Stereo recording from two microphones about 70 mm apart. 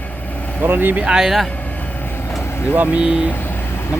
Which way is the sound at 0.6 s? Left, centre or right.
Right.